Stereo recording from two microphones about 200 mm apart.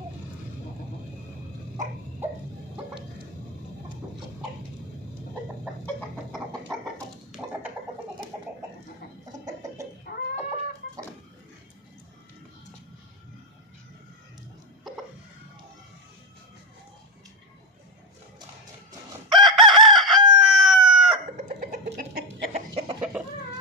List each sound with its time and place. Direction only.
19.2 s chicken: centre (ahead or behind)
20.2 s chicken: 20° right (ahead or behind)
20.4 s chicken: 5° right (ahead or behind)
21.4 s chicken: 35° right (ahead or behind)